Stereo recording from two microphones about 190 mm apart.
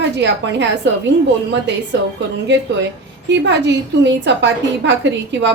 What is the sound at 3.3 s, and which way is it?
A woman's voice, 65° right (ahead or behind).